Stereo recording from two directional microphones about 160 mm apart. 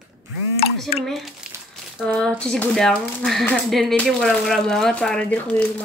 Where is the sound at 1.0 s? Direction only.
Centre (ahead or behind).